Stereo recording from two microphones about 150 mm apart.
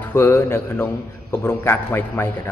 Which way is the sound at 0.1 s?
15° left (ahead or behind).